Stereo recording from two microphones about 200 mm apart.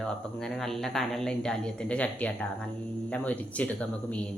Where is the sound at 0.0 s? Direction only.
5° left (ahead or behind).